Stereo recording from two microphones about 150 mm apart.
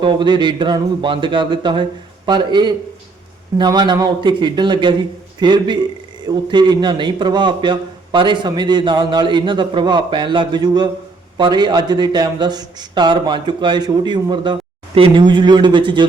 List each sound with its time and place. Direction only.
0.0 s a man's voice: 30° right (ahead or behind)